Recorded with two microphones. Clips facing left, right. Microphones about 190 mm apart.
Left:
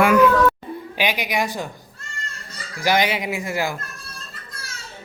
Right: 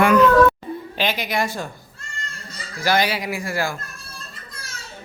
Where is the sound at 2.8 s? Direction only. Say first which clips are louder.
Left 1 dB; 15° left (ahead or behind).